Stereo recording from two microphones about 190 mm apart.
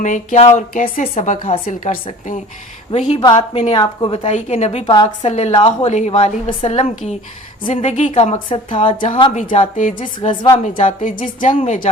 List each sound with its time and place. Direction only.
0.0 s a woman's voice: 40° left (ahead or behind)
1.6 s a woman's voice: 50° left (ahead or behind); by 9.0 s 25° left (ahead or behind)
9.5 s a woman's voice: 40° left (ahead or behind)
10.2 s a woman's voice: 25° left (ahead or behind)
10.6 s a woman's voice: 40° left (ahead or behind)
11.5 s a woman's voice: 30° left (ahead or behind)